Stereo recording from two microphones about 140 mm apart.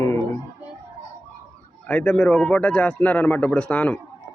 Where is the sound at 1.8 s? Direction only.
10° left (ahead or behind).